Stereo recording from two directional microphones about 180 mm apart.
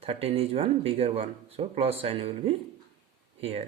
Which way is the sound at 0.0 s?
35° right (ahead or behind).